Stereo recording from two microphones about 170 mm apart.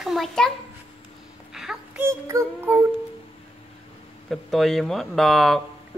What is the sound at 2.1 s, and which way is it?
Music, 15° right (ahead or behind).